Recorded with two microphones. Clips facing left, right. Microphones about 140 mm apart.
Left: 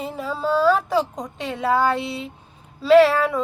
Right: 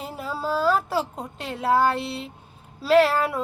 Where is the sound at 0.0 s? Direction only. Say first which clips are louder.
Left 4 dB; centre (ahead or behind).